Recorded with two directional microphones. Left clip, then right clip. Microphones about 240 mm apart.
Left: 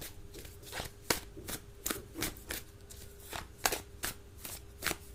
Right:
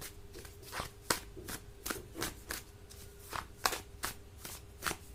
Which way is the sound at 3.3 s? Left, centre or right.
Centre.